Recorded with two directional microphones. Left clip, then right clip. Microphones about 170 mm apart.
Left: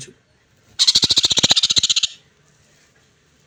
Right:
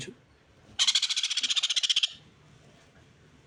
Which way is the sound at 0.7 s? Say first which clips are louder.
Left 11 dB; 15° right (ahead or behind).